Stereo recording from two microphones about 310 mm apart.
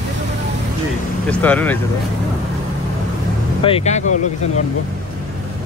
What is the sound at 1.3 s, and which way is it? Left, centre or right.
Speech, centre.